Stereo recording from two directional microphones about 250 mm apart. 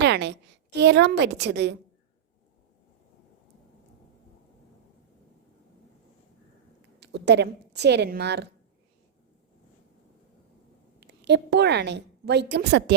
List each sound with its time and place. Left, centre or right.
0.0 s a woman's voice: right
7.0 s a woman's voice: right
11.0 s a woman's voice: right